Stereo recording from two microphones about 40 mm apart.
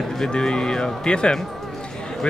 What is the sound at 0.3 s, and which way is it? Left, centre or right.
Speech, centre.